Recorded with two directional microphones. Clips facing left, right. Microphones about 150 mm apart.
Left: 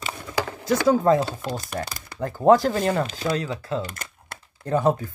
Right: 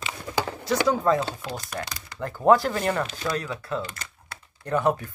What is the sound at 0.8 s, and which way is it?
Speech, 30° left (ahead or behind).